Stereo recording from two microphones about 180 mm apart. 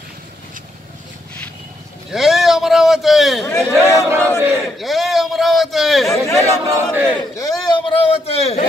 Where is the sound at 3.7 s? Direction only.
15° left (ahead or behind).